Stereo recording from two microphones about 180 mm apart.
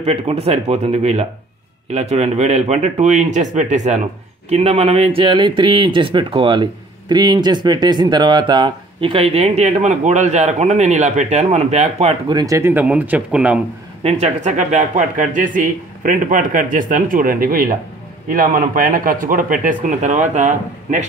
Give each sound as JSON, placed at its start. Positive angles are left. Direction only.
{"t": 0.0, "sound": "speech", "side_deg": -35}
{"t": 14.0, "sound": "speech", "side_deg": -40}